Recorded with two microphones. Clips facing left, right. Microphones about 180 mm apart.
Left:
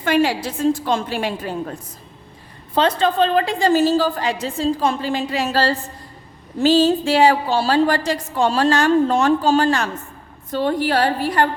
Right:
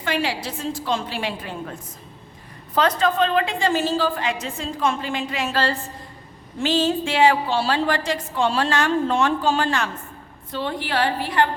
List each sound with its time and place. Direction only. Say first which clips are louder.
0.0 s a woman's voice: left 7 dB; 45° left (ahead or behind)
2.7 s a woman's voice: left 3 dB; 30° left (ahead or behind)